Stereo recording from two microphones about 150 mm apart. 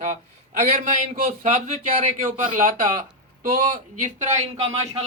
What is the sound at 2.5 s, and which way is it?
Speech, 60° right (ahead or behind).